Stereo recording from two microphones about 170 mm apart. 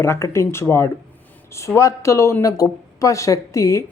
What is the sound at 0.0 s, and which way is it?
A man's voice, 15° left (ahead or behind).